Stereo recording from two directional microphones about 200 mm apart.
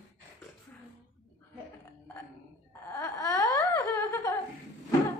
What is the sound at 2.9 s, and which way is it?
Wail, 15° left (ahead or behind).